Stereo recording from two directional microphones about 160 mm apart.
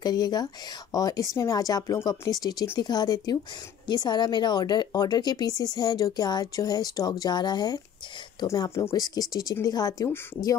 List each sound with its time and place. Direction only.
0.0 s speech: 25° left (ahead or behind)